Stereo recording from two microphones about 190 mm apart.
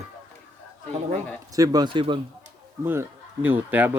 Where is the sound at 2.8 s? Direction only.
10° right (ahead or behind).